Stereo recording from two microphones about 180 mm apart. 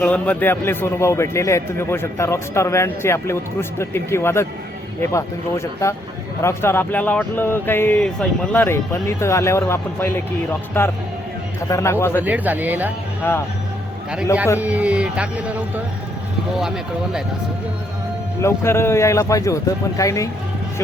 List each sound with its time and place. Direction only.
0.0 s a man's voice: 10° left (ahead or behind)
12.2 s speech: 10° right (ahead or behind)
13.2 s a man's voice: 10° left (ahead or behind)
14.6 s speech: 10° right (ahead or behind)
18.4 s a man's voice: 15° left (ahead or behind)